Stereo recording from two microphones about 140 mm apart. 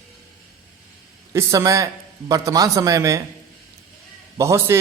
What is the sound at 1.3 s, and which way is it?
A man's voice, 20° right (ahead or behind).